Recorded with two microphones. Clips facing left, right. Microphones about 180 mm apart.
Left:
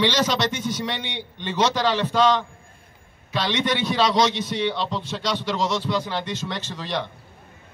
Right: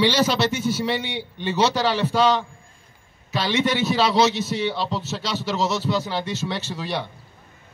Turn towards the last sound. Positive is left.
turn(degrees=-10)  # may be behind; listen again after turning